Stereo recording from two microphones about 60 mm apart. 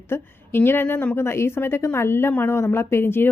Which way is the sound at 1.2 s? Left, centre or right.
Left.